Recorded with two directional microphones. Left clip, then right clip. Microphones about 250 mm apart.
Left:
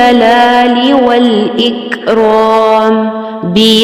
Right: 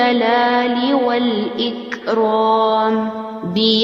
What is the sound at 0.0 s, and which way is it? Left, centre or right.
Mantra, left.